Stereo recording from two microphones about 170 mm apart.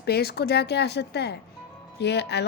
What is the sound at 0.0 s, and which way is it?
A woman's voice, 65° left (ahead or behind).